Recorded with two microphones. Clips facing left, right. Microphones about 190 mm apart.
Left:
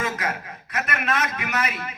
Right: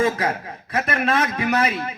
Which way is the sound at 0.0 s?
30° right (ahead or behind).